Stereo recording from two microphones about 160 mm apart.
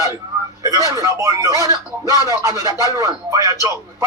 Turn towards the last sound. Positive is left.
turn(degrees=-20)  # may be behind; listen again after turning